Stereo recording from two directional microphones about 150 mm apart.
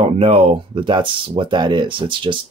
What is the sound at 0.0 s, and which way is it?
Speech, 40° right (ahead or behind).